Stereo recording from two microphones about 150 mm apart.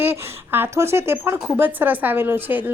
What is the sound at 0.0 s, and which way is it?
A woman's voice, 15° right (ahead or behind).